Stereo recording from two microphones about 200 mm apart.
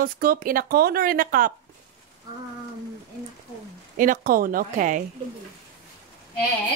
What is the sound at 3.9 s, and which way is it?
Speech, 40° right (ahead or behind).